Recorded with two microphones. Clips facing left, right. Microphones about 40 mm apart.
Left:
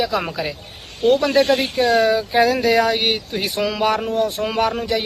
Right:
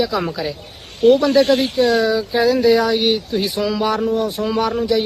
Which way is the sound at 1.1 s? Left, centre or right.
Left.